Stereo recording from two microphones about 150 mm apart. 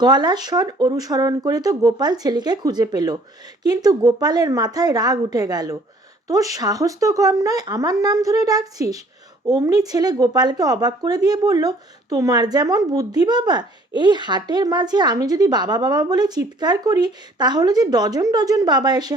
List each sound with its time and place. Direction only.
0.0 s speech: 25° right (ahead or behind)